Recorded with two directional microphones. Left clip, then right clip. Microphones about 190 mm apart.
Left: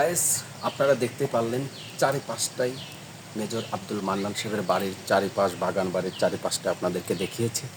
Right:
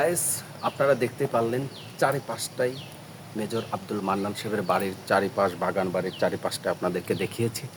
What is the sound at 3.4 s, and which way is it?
Speech, 5° right (ahead or behind).